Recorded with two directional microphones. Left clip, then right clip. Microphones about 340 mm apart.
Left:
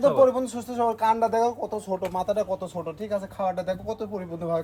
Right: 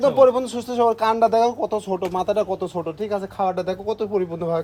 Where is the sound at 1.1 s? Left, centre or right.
Right.